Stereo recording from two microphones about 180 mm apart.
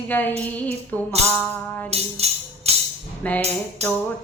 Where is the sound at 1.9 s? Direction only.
35° right (ahead or behind).